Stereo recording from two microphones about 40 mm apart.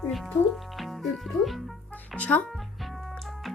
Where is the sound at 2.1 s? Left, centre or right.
Left.